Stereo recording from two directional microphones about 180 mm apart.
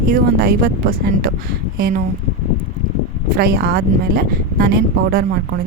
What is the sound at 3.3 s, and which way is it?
Speech, 60° right (ahead or behind).